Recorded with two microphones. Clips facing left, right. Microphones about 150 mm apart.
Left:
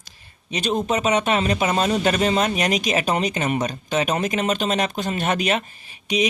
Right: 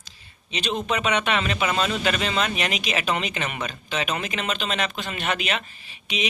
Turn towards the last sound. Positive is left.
turn(degrees=45)  # may be behind; listen again after turning